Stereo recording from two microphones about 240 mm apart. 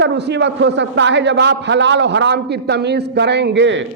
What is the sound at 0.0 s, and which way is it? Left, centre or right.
A man's voice, right.